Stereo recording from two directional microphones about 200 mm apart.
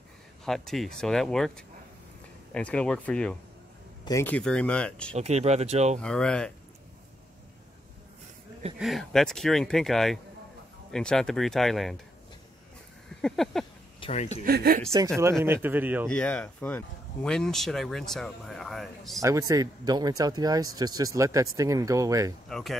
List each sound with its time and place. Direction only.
0.5 s speech: centre (ahead or behind)
2.5 s speech: 5° left (ahead or behind)
5.1 s speech: 35° right (ahead or behind)
5.9 s speech: 5° left (ahead or behind)
8.7 s speech: centre (ahead or behind)
13.2 s speech: centre (ahead or behind)
13.9 s a man's voice: 30° left (ahead or behind)
14.4 s speech: 50° right (ahead or behind)
15.4 s speech: 10° right (ahead or behind)
16.1 s speech: 5° left (ahead or behind)
19.2 s speech: 15° right (ahead or behind)
22.5 s speech: centre (ahead or behind)